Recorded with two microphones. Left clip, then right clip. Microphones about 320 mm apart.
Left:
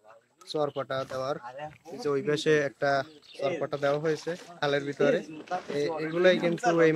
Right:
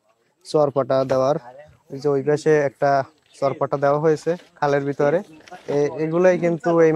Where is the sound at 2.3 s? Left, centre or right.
Right.